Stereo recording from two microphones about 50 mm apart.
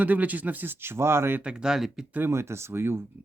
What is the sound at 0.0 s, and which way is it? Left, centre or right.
Speech, right.